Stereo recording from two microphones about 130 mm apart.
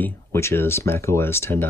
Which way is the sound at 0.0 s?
20° left (ahead or behind).